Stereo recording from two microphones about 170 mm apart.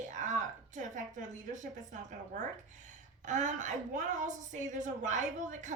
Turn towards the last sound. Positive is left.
turn(degrees=-45)  # may be behind; listen again after turning